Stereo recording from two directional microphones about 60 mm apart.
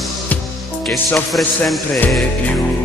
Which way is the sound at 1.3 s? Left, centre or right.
Centre.